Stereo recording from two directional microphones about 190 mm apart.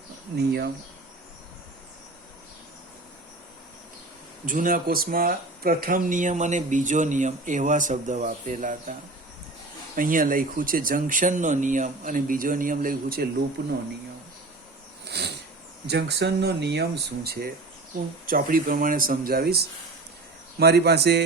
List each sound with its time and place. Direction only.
0.3 s speech: 55° right (ahead or behind)
4.4 s speech: 45° right (ahead or behind)
15.0 s a sound: 60° right (ahead or behind)
15.9 s speech: 60° right (ahead or behind)